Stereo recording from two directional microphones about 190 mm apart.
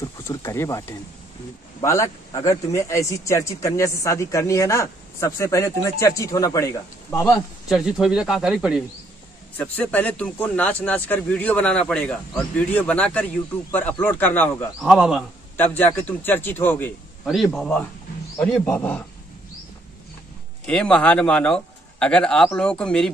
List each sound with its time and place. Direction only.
0.0 s a man's voice: 15° left (ahead or behind)
7.7 s speech: 5° right (ahead or behind)
9.6 s a man's voice: 10° left (ahead or behind)
15.5 s a man's voice: 10° left (ahead or behind)
20.6 s speech: 5° left (ahead or behind)